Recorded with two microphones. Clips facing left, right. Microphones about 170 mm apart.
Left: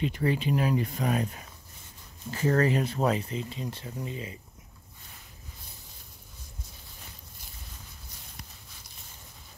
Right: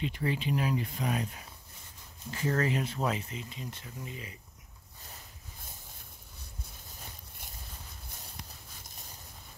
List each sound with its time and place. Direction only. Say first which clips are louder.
0.0 s speech: left 5 dB; 45° left (ahead or behind); by 4.4 s 25° left (ahead or behind)